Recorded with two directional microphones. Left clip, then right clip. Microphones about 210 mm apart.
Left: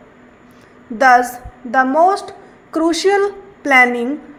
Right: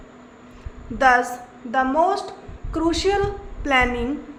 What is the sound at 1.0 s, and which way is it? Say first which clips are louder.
A woman's voice: left 6 dB; 20° left (ahead or behind).